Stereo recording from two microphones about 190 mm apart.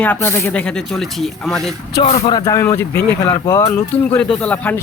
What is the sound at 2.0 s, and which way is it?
Speech, 30° left (ahead or behind).